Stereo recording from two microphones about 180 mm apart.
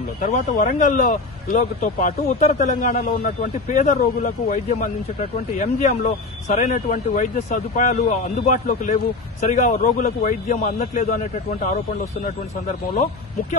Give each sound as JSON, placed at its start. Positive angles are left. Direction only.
{"t": 0.2, "sound": "a man's voice", "side_deg": 45}
{"t": 12.9, "sound": "a man's voice", "side_deg": 45}